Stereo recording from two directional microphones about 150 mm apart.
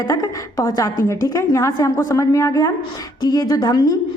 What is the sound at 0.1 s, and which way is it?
A woman's voice, 25° left (ahead or behind).